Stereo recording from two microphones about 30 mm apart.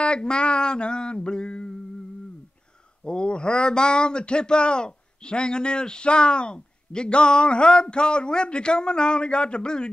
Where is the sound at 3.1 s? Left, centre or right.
Left.